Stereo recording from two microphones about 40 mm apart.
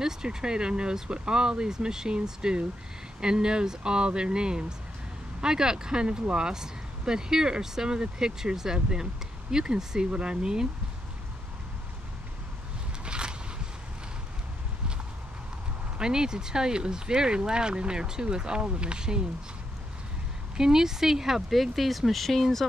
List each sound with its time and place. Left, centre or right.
0.0 s speech: centre
13.0 s a sound: right
16.0 s speech: centre
20.5 s speech: centre